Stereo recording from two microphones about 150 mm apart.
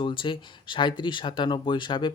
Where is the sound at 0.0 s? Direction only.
35° left (ahead or behind).